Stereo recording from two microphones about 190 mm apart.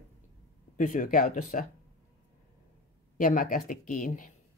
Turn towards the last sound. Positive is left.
turn(degrees=45)  # may be behind; listen again after turning